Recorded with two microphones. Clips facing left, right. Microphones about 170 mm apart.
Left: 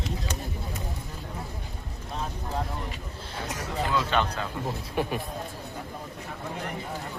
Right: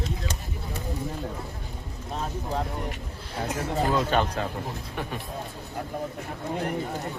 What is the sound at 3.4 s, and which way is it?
Speech, 35° right (ahead or behind).